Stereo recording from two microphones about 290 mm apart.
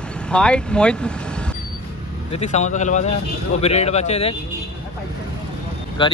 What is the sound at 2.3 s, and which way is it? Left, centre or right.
Speech, left.